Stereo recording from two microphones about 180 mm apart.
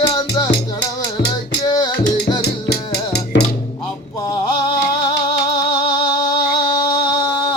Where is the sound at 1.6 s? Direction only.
20° left (ahead or behind).